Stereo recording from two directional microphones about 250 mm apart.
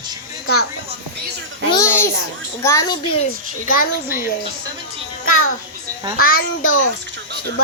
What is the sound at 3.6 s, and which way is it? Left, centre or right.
Speech, left.